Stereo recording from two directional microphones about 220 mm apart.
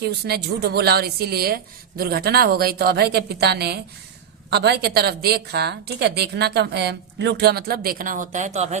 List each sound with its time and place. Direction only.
0.0 s a woman's voice: 50° right (ahead or behind); by 8.8 s 30° right (ahead or behind)